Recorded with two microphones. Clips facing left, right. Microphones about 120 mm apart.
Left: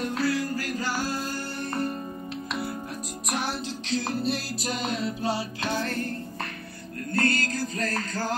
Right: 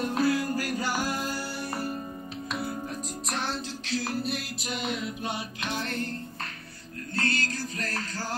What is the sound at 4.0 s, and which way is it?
Music, 25° left (ahead or behind).